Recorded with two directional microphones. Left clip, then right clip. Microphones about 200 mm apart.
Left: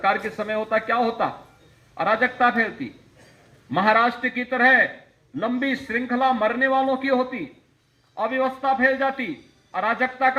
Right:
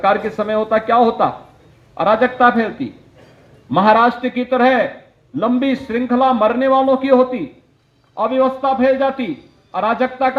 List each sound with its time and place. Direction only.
0.0 s a man's voice: 50° right (ahead or behind)